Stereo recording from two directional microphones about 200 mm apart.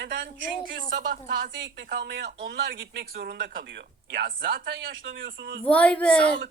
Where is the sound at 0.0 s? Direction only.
60° right (ahead or behind).